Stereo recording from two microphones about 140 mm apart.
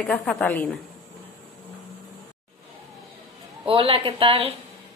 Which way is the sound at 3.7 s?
40° right (ahead or behind).